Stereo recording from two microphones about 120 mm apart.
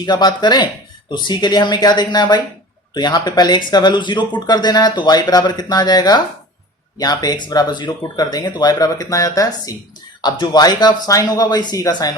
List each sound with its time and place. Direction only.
0.0 s speech: 35° left (ahead or behind)